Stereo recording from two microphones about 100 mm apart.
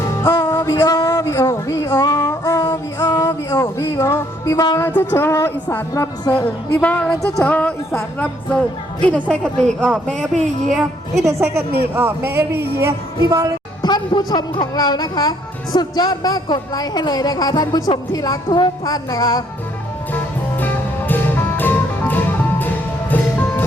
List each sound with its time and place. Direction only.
0.2 s music: 30° left (ahead or behind)
2.0 s music: 45° left (ahead or behind)
2.2 s music: 30° left (ahead or behind)
4.8 s a sound: 20° left (ahead or behind)
5.9 s speech: 35° left (ahead or behind)
6.3 s speech: 15° left (ahead or behind)
11.3 s speech: 25° right (ahead or behind)
13.2 s speech: 40° right (ahead or behind)
13.8 s speech: 45° left (ahead or behind)
20.1 s music: 20° left (ahead or behind)